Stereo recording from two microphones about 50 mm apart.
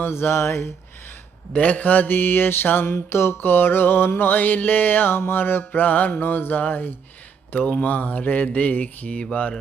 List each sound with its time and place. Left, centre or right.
0.0 s speech: left
1.5 s mantra: left
9.0 s speech: left